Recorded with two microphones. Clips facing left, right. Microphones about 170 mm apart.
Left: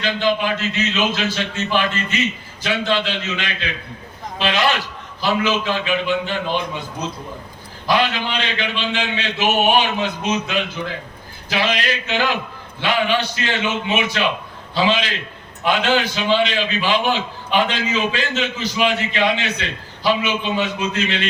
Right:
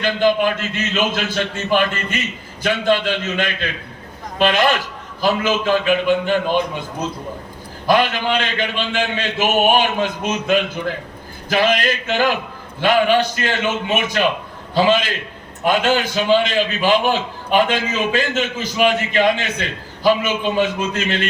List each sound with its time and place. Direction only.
0.0 s a man's voice: 50° right (ahead or behind)
7.9 s a man's voice: 50° right (ahead or behind)